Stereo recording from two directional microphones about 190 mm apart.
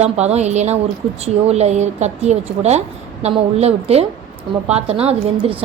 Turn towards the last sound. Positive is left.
turn(degrees=-30)  # may be behind; listen again after turning